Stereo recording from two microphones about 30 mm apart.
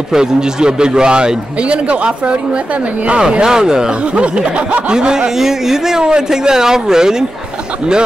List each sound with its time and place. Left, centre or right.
0.1 s speech: right
1.6 s speech: right
4.0 s snicker: right
4.8 s speech: right
5.3 s speech: centre
6.0 s speech: right